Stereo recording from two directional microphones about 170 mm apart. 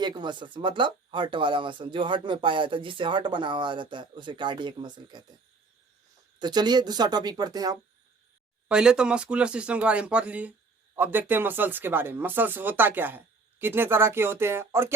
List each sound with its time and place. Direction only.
0.0 s speech: 25° right (ahead or behind)
6.4 s speech: 25° right (ahead or behind)
8.6 s speech: 5° right (ahead or behind)